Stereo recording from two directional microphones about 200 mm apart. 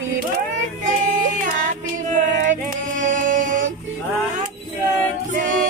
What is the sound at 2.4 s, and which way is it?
Music, 40° right (ahead or behind).